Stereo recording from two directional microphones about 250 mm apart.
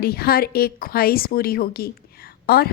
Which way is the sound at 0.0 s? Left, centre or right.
Left.